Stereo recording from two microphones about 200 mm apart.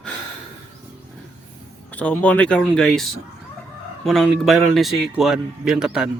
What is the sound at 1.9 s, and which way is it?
A man's voice, 5° left (ahead or behind).